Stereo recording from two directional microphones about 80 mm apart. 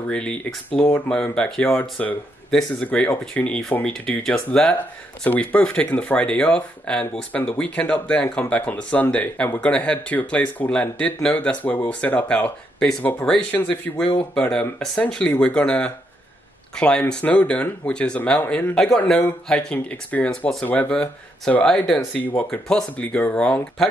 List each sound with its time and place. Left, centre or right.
0.1 s speech: centre